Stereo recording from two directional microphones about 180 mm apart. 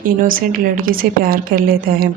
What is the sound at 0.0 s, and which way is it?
Speech, 50° right (ahead or behind).